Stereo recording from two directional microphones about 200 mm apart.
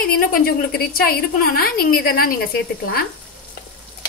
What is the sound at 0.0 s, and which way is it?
A woman's voice, 50° left (ahead or behind).